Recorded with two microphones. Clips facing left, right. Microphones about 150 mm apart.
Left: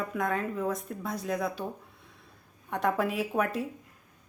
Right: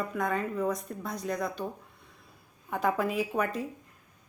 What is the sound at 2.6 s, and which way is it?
A woman's voice, centre (ahead or behind).